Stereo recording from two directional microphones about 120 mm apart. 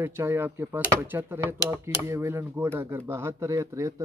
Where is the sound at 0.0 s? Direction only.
20° right (ahead or behind).